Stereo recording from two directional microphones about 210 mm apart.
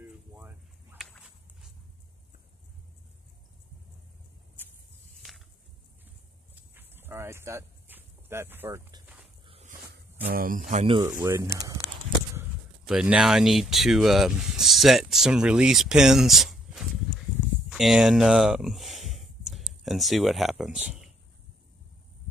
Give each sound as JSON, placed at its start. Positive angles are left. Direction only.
{"t": 0.0, "sound": "a sound", "side_deg": -10}
{"t": 6.5, "sound": "walk", "side_deg": -10}
{"t": 9.5, "sound": "a sound", "side_deg": -35}
{"t": 10.3, "sound": "speech", "side_deg": -40}
{"t": 11.0, "sound": "speech", "side_deg": -15}
{"t": 12.4, "sound": "speech", "side_deg": -5}